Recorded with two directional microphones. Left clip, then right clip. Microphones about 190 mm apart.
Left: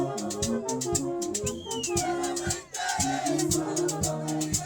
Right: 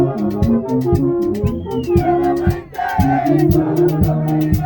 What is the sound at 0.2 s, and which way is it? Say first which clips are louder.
Music: right 12 dB; 50° right (ahead or behind).